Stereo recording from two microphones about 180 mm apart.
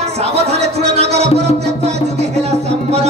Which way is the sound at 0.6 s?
35° right (ahead or behind).